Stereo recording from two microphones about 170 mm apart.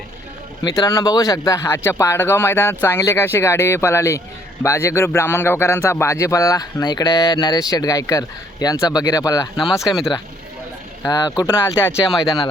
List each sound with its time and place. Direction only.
0.6 s speech: 20° left (ahead or behind)
9.8 s speech: centre (ahead or behind)
11.0 s speech: 20° left (ahead or behind)